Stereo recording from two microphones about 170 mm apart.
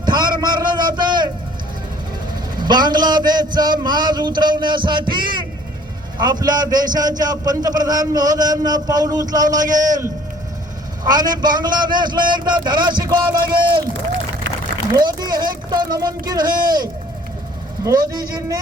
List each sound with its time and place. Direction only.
0.0 s a sound: 25° right (ahead or behind)
2.6 s a man's voice: 25° right (ahead or behind)
14.9 s a man's voice: 25° right (ahead or behind)